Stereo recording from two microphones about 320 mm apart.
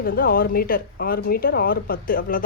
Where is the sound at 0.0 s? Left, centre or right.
Left.